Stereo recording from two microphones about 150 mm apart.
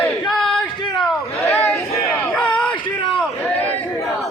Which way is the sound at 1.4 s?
15° left (ahead or behind).